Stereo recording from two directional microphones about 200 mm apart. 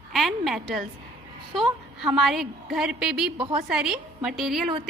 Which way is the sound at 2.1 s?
Centre (ahead or behind).